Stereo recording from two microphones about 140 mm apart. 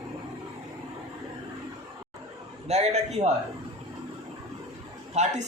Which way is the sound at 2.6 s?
50° right (ahead or behind).